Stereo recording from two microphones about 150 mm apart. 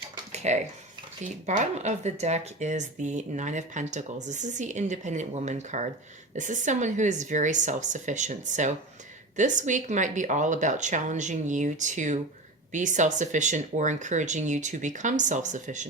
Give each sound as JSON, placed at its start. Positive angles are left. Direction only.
{"t": 0.4, "sound": "speech", "side_deg": -50}